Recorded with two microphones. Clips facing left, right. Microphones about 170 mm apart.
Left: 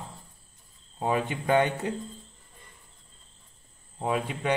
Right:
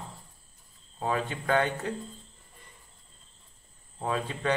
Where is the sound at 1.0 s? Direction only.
15° left (ahead or behind).